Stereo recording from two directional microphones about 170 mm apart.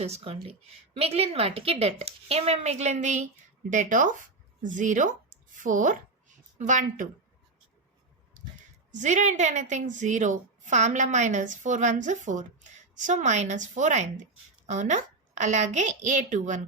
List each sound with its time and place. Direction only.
0.0 s a woman's voice: 40° right (ahead or behind)
8.9 s a woman's voice: 45° right (ahead or behind)